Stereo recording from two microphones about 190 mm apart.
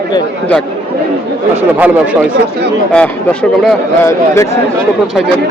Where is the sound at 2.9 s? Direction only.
5° left (ahead or behind).